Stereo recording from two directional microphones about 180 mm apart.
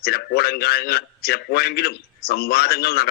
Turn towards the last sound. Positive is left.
turn(degrees=60)  # may be behind; listen again after turning